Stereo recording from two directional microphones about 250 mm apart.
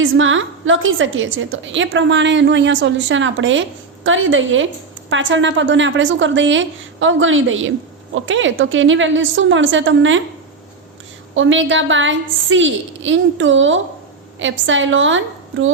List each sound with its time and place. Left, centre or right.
0.0 s a woman's voice: right
11.3 s a woman's voice: right